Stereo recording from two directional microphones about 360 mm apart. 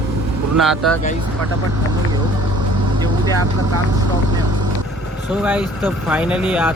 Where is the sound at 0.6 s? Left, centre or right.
Centre.